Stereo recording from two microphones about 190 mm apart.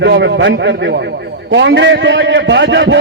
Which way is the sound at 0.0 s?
65° right (ahead or behind).